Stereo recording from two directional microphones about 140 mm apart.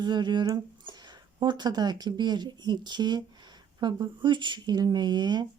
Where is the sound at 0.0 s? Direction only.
30° right (ahead or behind).